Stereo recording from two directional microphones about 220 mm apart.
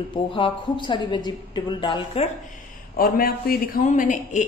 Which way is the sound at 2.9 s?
40° left (ahead or behind).